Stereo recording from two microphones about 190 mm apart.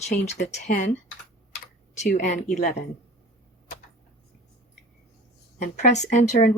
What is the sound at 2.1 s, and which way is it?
Speech, 40° left (ahead or behind).